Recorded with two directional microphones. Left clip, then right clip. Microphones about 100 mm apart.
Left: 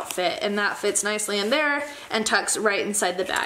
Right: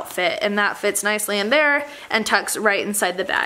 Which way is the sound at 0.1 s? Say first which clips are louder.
Right 4 dB; 35° right (ahead or behind).